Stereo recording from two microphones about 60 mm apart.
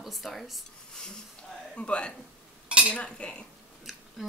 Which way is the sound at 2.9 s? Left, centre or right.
Centre.